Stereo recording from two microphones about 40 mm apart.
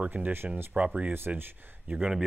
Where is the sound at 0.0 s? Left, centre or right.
Right.